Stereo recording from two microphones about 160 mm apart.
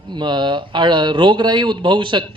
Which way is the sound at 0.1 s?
30° right (ahead or behind).